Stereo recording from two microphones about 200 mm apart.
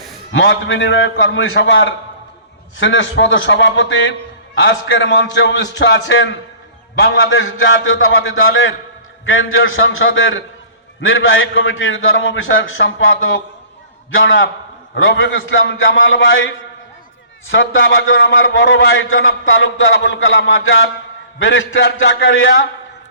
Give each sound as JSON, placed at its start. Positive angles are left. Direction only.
{"t": 0.3, "sound": "a man's voice", "side_deg": 70}
{"t": 11.0, "sound": "a man's voice", "side_deg": 90}